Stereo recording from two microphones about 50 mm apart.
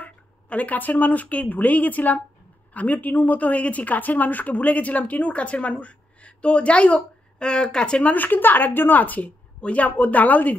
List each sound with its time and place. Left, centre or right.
0.0 s a woman's voice: left
8.0 s a woman's voice: left